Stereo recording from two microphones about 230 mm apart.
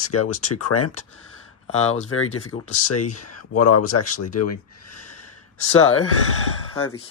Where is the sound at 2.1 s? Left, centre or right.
Left.